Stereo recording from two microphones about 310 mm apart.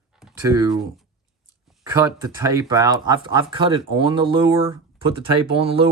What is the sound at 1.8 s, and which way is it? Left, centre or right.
Speech, centre.